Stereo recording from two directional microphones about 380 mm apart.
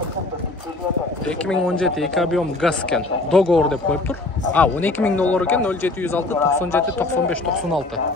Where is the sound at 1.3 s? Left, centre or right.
Centre.